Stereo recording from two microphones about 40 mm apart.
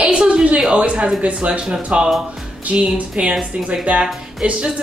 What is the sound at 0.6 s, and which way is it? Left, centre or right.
Speech, right.